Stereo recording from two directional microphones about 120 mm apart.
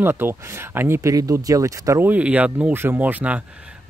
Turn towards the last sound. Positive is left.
turn(degrees=-15)  # may be behind; listen again after turning